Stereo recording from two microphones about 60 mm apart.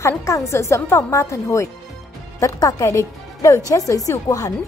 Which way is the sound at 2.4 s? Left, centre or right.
Left.